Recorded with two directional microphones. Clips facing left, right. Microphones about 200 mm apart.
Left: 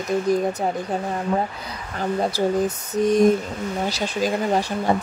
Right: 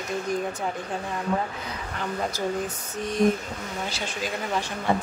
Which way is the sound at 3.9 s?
40° left (ahead or behind).